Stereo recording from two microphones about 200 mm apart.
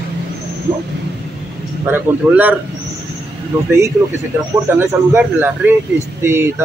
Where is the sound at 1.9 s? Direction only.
10° right (ahead or behind).